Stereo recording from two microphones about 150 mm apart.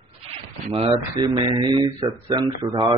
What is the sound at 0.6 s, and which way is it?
Speech, 45° right (ahead or behind).